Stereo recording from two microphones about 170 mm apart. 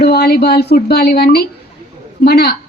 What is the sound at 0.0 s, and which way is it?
A woman's voice, 70° left (ahead or behind).